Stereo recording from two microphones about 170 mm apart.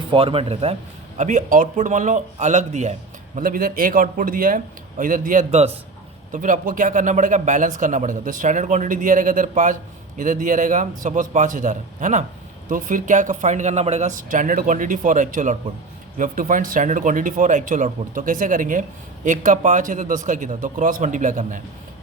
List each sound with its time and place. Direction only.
0.1 s speech: 35° right (ahead or behind)
1.2 s speech: 50° right (ahead or behind)
3.3 s speech: 55° right (ahead or behind); by 5.7 s 40° right (ahead or behind)
6.3 s speech: 50° right (ahead or behind)